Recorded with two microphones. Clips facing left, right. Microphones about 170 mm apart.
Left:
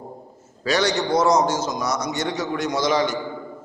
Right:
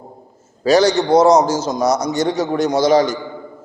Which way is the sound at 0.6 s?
35° right (ahead or behind).